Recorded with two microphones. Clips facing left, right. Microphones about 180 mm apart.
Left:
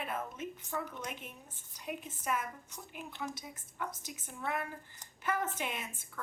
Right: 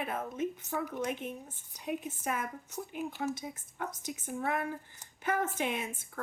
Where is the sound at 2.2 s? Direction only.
55° right (ahead or behind).